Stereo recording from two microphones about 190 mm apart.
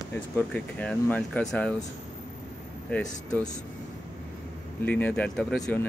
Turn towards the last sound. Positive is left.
turn(degrees=5)  # may be behind; listen again after turning